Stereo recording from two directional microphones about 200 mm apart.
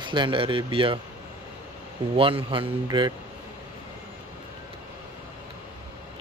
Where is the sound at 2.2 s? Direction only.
25° right (ahead or behind).